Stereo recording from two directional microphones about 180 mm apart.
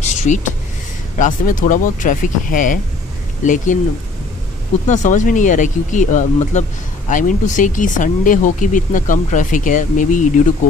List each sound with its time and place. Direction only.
0.0 s a sound: 40° left (ahead or behind)
1.1 s speech: 45° left (ahead or behind)
4.8 s speech: 45° left (ahead or behind)